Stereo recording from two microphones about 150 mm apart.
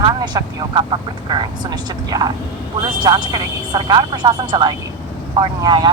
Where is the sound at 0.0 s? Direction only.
30° right (ahead or behind).